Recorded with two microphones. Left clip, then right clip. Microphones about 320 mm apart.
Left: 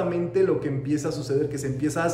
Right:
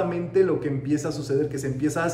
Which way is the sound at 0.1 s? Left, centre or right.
Centre.